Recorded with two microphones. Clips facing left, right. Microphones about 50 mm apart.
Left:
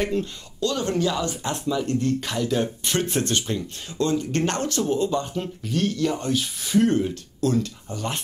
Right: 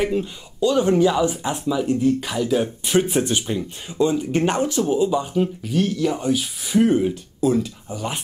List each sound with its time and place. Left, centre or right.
0.0 s speech: centre